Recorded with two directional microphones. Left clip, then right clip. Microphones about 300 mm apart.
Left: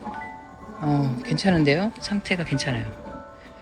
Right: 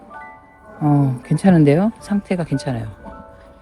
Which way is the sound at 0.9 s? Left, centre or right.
Centre.